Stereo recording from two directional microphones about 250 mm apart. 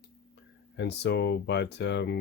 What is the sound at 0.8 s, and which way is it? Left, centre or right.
Speech, left.